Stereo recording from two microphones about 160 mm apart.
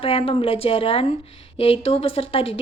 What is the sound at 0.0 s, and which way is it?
Speech, 35° left (ahead or behind).